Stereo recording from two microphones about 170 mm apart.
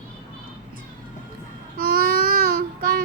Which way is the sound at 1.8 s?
60° right (ahead or behind).